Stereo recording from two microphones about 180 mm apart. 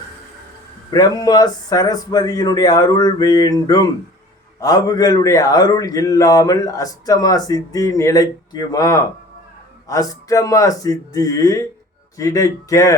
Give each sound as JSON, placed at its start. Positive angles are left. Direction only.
{"t": 0.9, "sound": "speech", "side_deg": 20}